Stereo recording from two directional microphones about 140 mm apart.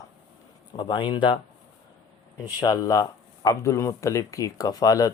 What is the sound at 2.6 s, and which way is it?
Speech, 25° left (ahead or behind).